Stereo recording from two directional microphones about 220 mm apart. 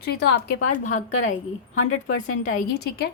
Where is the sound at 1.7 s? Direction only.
75° left (ahead or behind).